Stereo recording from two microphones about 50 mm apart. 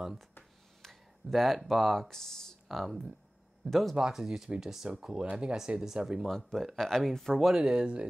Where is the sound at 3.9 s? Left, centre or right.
Centre.